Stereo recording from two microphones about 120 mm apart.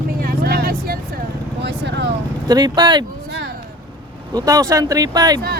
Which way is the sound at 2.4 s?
35° right (ahead or behind).